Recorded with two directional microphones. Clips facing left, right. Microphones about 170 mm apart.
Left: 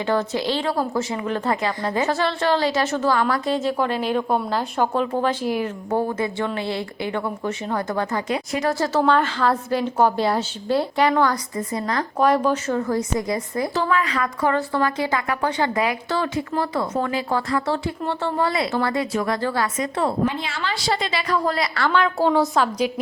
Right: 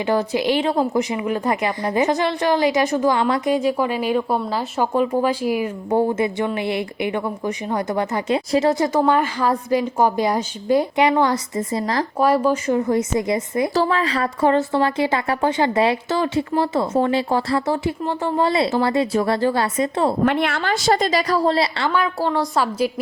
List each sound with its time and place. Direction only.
0.0 s a woman's voice: 15° right (ahead or behind); by 12.0 s 30° right (ahead or behind)
12.2 s a woman's voice: 10° right (ahead or behind)
13.7 s speech: 30° right (ahead or behind)
20.2 s a woman's voice: 60° right (ahead or behind); by 21.8 s 30° right (ahead or behind)
22.0 s a woman's voice: centre (ahead or behind)